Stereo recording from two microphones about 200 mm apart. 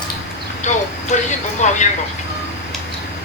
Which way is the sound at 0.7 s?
35° left (ahead or behind).